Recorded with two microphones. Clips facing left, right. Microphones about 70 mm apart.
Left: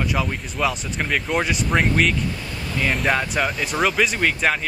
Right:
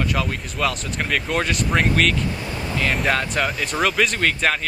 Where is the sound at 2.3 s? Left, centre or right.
Right.